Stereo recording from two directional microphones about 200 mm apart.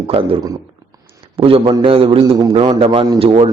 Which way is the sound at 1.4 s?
25° right (ahead or behind).